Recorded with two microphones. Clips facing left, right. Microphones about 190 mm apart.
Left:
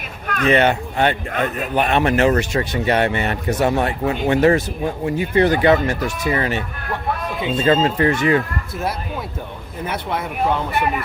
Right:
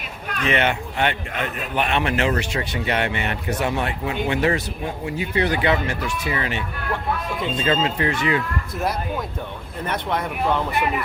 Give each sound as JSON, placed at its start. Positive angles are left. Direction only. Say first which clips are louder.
{"t": 0.3, "sound": "speech", "louder": "left 6 dB", "side_deg": 45}
{"t": 9.8, "sound": "speech", "louder": "even", "side_deg": 5}